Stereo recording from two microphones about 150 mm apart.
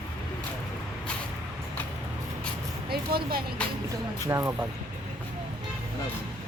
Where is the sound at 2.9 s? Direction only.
90° right.